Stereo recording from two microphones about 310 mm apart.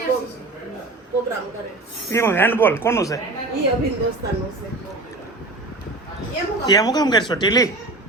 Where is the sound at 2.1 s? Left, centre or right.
Centre.